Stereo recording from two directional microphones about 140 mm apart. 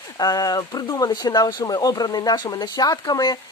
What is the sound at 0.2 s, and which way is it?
Speech, 25° left (ahead or behind).